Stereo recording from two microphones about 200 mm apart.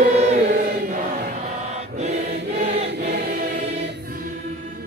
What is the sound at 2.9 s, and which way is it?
Choir, 55° right (ahead or behind).